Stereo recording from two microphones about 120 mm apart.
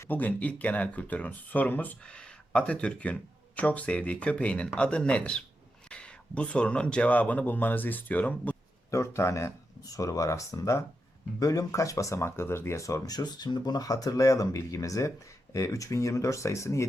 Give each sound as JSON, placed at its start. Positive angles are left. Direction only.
{"t": 0.0, "sound": "speech", "side_deg": 15}
{"t": 8.9, "sound": "speech", "side_deg": 25}